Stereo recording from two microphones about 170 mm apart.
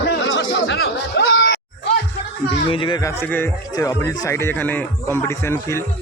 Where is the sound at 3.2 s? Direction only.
10° left (ahead or behind).